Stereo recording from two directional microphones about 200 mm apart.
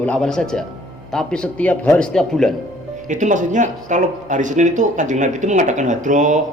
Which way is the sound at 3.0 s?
40° right (ahead or behind).